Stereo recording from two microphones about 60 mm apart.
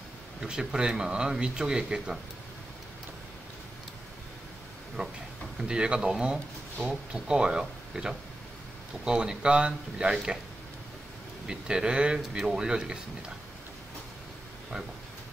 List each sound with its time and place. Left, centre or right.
0.4 s a man's voice: centre
5.0 s a man's voice: centre
11.4 s a man's voice: centre